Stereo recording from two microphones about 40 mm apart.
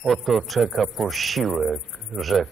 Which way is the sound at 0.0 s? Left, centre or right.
Centre.